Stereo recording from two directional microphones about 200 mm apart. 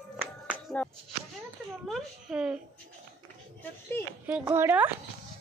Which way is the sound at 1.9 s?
Centre (ahead or behind).